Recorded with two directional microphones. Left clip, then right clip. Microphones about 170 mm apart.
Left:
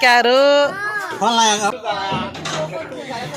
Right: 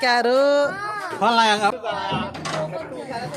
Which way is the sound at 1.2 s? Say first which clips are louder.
Left 1 dB; 10° left (ahead or behind).